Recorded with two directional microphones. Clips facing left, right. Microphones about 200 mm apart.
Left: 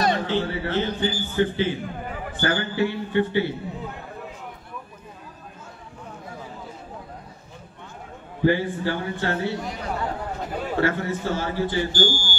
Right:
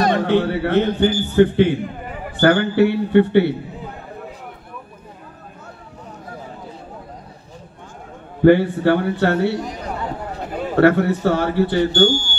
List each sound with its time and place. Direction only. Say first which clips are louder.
0.0 s a man's voice: right 6 dB; 60° right (ahead or behind)
8.4 s a man's voice: right 9 dB; 65° right (ahead or behind)